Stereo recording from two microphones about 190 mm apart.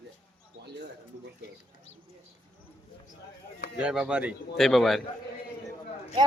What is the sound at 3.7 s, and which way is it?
A man's voice, 5° right (ahead or behind).